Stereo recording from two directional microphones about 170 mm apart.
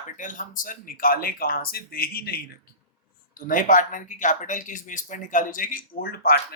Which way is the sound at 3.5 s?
50° left (ahead or behind).